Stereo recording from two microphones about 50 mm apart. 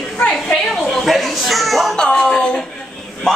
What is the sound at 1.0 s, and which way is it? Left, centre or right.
Speech, centre.